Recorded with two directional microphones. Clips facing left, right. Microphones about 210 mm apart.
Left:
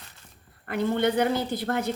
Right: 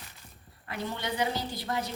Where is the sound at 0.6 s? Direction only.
55° left (ahead or behind).